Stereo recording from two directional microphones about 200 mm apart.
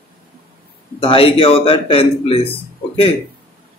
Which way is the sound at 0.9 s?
25° left (ahead or behind).